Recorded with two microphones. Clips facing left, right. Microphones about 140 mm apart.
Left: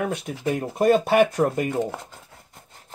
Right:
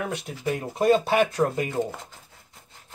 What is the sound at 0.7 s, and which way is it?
Speech, 55° left (ahead or behind).